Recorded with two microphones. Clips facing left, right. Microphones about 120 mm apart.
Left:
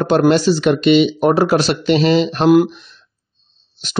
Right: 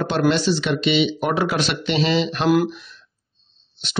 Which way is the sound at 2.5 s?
25° left (ahead or behind).